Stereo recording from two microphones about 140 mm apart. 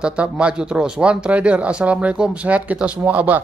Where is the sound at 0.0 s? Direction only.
10° right (ahead or behind).